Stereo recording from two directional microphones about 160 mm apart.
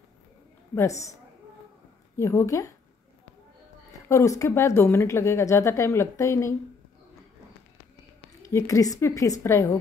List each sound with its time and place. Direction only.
0.7 s a woman's voice: 20° left (ahead or behind)
2.1 s a woman's voice: 15° left (ahead or behind)
4.1 s a woman's voice: 20° left (ahead or behind)
8.4 s a woman's voice: 20° left (ahead or behind)